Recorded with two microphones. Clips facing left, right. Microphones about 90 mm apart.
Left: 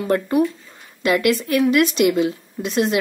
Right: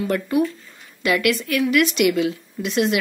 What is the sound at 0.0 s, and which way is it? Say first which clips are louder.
Speech: left 2 dB; 30° left (ahead or behind).